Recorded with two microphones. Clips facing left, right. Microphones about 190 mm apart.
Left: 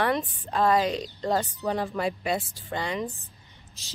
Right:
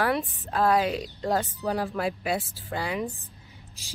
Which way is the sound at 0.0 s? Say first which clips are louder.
Even; 5° right (ahead or behind).